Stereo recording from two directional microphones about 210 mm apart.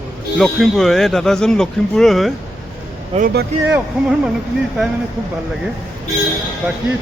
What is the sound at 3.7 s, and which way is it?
Speech, 5° right (ahead or behind).